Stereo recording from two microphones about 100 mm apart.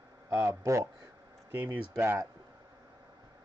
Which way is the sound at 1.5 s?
20° right (ahead or behind).